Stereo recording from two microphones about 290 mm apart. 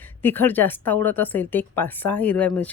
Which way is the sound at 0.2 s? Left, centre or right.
Centre.